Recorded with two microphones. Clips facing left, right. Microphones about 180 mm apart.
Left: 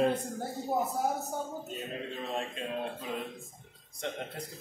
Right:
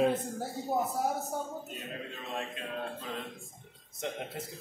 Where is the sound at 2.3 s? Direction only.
25° left (ahead or behind).